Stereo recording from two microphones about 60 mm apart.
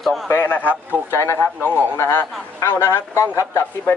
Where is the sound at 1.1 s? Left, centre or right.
Left.